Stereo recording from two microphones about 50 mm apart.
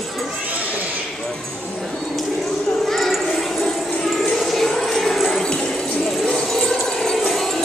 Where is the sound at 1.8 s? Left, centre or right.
Centre.